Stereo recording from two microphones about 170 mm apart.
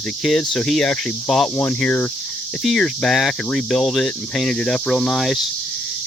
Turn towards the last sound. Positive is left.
turn(degrees=0)  # may be behind; listen again after turning